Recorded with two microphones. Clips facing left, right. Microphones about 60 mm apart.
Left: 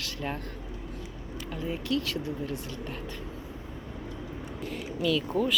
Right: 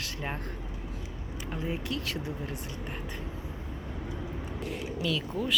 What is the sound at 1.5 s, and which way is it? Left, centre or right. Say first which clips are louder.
Speech: left 3 dB; right.